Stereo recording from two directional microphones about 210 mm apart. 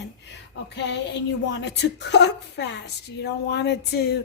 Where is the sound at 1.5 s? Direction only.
55° left (ahead or behind).